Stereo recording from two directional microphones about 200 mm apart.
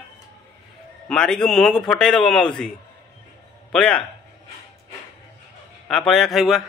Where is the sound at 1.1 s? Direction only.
5° left (ahead or behind).